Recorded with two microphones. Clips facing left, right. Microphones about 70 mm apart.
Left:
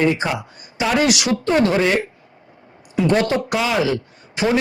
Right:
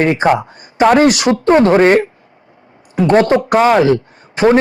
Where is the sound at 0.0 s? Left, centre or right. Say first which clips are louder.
Right 7 dB; right.